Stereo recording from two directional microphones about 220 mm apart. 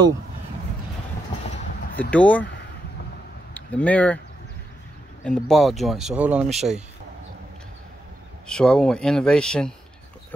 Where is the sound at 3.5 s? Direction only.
5° left (ahead or behind).